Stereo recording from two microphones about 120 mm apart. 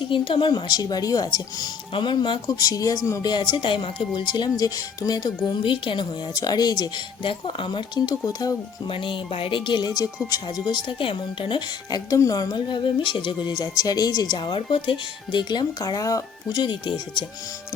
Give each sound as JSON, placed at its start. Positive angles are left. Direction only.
{"t": 0.1, "sound": "speech", "side_deg": 40}
{"t": 5.6, "sound": "speech", "side_deg": 45}
{"t": 8.9, "sound": "speech", "side_deg": 45}
{"t": 10.8, "sound": "speech", "side_deg": 45}